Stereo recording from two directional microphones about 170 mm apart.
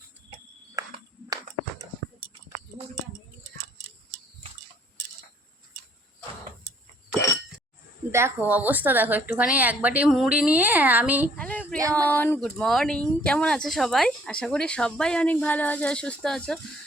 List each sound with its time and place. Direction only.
0.8 s a sound: 20° right (ahead or behind)
8.1 s a woman's voice: 15° right (ahead or behind)
11.3 s child singing: 10° left (ahead or behind)
11.9 s speech: 10° left (ahead or behind)